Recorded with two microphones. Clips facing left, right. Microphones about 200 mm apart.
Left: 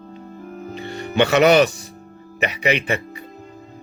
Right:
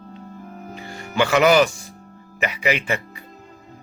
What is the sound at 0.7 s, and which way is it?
Music, 25° left (ahead or behind).